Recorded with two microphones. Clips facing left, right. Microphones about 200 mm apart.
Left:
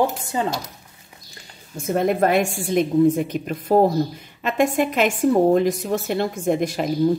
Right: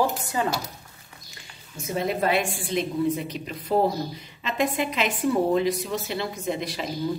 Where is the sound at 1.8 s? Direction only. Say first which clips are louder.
Left 7 dB; 55° left (ahead or behind).